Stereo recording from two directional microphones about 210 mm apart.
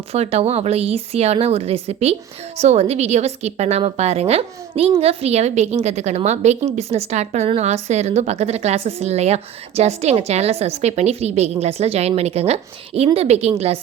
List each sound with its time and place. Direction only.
0.1 s a woman's voice: 30° right (ahead or behind)